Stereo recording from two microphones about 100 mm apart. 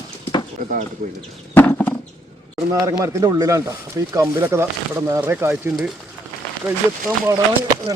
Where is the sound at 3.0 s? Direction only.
30° right (ahead or behind).